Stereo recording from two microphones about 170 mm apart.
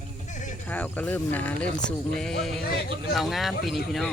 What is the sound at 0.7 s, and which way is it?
Speech, 10° left (ahead or behind).